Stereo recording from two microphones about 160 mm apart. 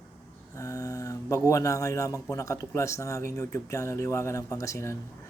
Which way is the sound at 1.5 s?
20° left (ahead or behind).